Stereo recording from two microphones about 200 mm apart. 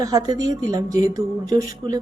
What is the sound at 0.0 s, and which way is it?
A man's voice, 20° right (ahead or behind).